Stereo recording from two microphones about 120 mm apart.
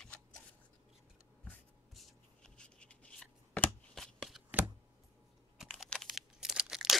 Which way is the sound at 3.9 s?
Centre (ahead or behind).